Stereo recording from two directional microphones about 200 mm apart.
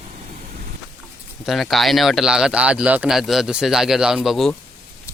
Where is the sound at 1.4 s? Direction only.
Centre (ahead or behind).